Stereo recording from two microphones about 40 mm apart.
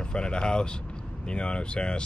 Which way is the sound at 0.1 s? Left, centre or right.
Left.